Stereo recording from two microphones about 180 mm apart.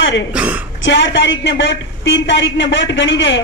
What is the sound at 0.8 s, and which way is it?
A woman's voice, 85° left.